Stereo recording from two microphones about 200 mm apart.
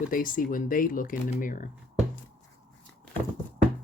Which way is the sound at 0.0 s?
40° left (ahead or behind).